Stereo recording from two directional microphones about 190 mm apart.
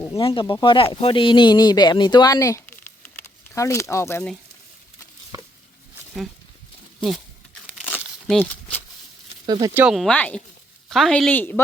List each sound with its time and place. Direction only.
0.2 s speech: 25° left (ahead or behind)
3.0 s a sound: 15° left (ahead or behind)
7.8 s crumpling: 5° right (ahead or behind)
9.5 s speech: 20° right (ahead or behind)
9.8 s speech: centre (ahead or behind)